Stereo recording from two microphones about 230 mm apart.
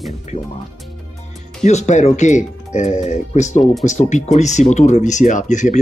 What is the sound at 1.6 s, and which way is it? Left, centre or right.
Speech, left.